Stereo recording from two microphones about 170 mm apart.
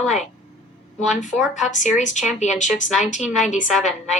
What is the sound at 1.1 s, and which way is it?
Speech, 45° left (ahead or behind).